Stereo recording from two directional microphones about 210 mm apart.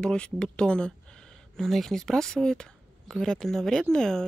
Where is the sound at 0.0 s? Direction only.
5° left (ahead or behind).